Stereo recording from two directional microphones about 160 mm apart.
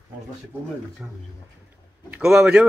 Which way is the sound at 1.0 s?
5° right (ahead or behind).